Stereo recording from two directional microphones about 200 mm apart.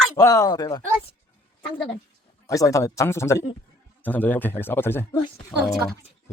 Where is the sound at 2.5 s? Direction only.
15° left (ahead or behind).